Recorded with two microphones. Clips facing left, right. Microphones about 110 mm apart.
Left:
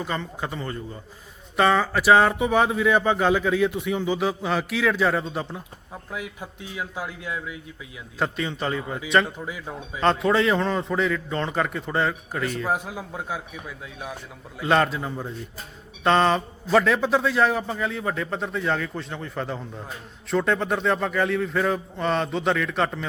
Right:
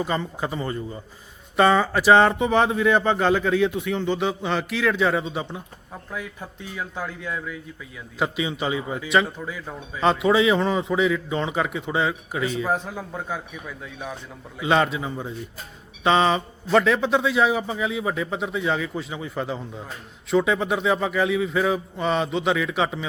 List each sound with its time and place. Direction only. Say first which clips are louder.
0.0 s speech: right 3 dB; centre (ahead or behind)
8.2 s speech: right 1 dB; 5° right (ahead or behind)
9.4 s speech: even; 15° left (ahead or behind)
10.0 s speech: right 2 dB; centre (ahead or behind)
12.7 s speech: right 1 dB; 10° left (ahead or behind)